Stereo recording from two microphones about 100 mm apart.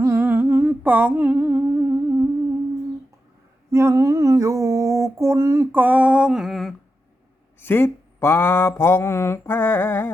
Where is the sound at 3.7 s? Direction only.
30° right (ahead or behind); by 6.7 s centre (ahead or behind).